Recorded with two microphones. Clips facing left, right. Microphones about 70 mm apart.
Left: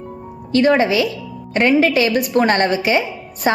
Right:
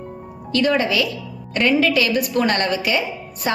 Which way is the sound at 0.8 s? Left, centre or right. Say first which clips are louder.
Left 4 dB; left.